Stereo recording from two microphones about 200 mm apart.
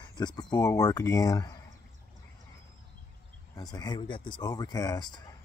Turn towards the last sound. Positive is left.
turn(degrees=20)  # may be behind; listen again after turning